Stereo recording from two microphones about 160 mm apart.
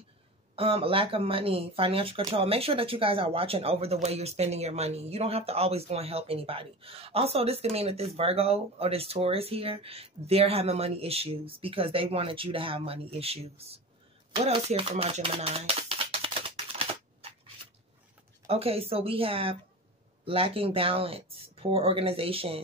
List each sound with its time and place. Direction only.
0.6 s speech: 35° right (ahead or behind)
14.3 s a sound: 40° right (ahead or behind)
18.5 s speech: 40° right (ahead or behind)